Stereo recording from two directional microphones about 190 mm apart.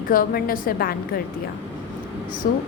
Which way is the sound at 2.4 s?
45° left (ahead or behind).